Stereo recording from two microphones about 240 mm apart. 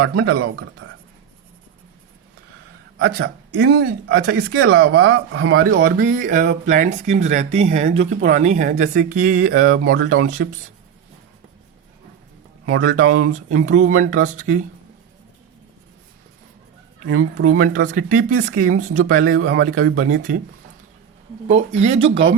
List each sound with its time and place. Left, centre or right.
0.2 s speech: right
3.0 s speech: right
6.1 s speech: right
12.7 s speech: right
13.6 s speech: right
17.6 s speech: right
19.4 s speech: right
21.4 s speech: right